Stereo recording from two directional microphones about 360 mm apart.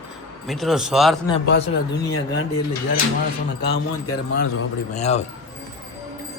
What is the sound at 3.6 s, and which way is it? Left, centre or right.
Speech, left.